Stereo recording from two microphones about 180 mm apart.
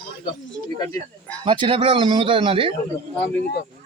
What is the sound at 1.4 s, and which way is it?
Speech, 25° right (ahead or behind).